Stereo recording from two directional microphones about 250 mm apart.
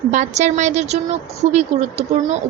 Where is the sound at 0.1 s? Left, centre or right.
Right.